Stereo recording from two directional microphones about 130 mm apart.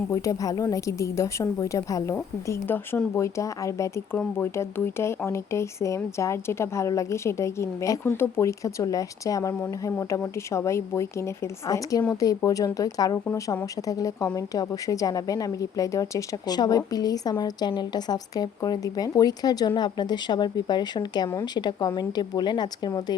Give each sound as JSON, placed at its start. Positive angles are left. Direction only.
{"t": 0.1, "sound": "speech", "side_deg": 25}